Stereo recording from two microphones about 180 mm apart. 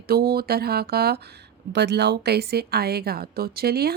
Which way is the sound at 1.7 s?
70° right (ahead or behind).